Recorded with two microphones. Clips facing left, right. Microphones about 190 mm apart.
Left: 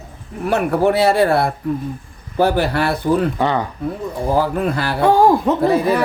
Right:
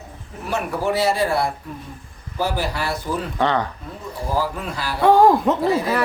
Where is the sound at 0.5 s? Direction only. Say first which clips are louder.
Left 6 dB; 60° left (ahead or behind).